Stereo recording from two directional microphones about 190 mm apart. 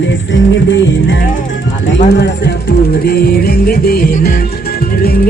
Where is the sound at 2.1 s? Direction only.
65° left (ahead or behind).